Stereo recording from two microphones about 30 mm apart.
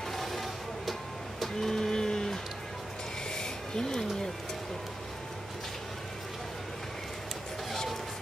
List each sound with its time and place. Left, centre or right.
0.1 s music: centre
1.4 s printer: centre
3.3 s a sound: left
7.7 s music: centre